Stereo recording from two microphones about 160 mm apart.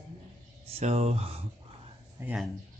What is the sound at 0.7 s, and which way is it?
Speech, 40° right (ahead or behind).